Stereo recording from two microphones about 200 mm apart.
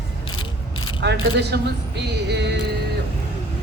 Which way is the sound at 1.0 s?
55° right (ahead or behind).